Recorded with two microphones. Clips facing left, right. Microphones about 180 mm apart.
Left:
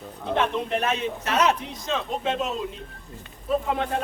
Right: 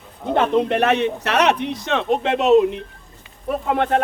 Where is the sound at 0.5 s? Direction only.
70° right (ahead or behind).